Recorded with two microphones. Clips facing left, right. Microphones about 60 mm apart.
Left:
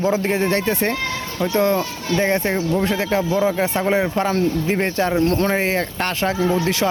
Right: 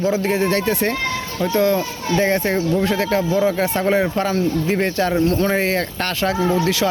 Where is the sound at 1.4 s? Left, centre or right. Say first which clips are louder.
Right 1 dB; centre.